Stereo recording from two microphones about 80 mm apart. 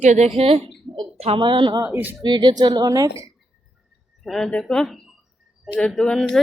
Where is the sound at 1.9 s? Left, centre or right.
Right.